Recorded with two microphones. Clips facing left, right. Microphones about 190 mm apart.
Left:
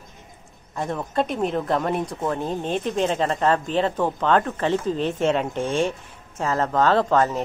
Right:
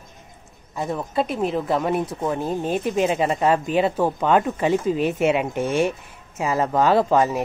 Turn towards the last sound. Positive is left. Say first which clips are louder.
# right 1 dB
turn(degrees=-10)  # may be behind; listen again after turning